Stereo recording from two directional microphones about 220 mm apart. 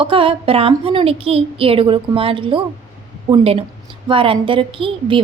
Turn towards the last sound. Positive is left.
turn(degrees=-25)  # may be behind; listen again after turning